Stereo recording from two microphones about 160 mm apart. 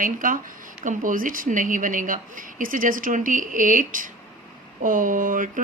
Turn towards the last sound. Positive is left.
turn(degrees=-55)  # may be behind; listen again after turning